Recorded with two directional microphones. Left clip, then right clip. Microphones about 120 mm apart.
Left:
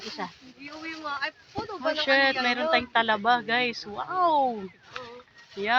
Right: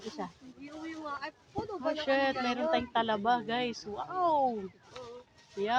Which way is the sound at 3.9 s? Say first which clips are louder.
Left 6 dB; 30° left (ahead or behind).